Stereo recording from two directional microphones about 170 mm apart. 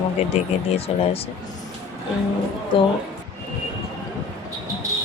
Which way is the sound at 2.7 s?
30° left (ahead or behind).